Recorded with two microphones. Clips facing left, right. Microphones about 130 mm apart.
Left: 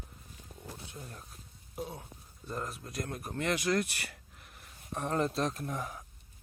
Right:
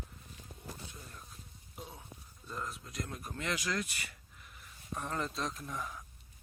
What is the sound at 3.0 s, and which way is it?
Speech, 50° left (ahead or behind).